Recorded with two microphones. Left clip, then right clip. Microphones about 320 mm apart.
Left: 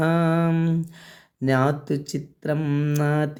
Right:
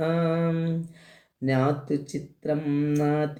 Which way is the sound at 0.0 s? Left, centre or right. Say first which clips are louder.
Left 3 dB; left.